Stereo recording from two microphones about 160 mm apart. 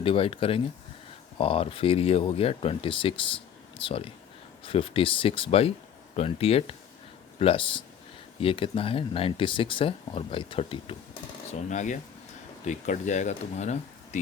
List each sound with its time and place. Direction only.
0.0 s speech: 35° left (ahead or behind)
11.7 s speech: 50° left (ahead or behind)